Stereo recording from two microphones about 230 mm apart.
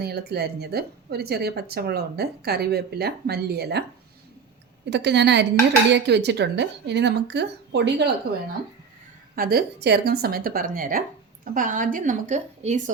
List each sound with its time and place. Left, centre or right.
0.0 s speech: right
4.9 s speech: right
9.3 s speech: right